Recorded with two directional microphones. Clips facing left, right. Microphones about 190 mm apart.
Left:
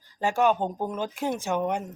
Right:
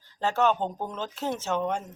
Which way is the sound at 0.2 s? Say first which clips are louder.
Left 1 dB; 10° left (ahead or behind).